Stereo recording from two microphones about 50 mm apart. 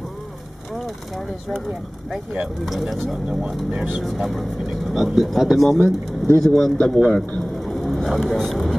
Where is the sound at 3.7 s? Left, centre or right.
Right.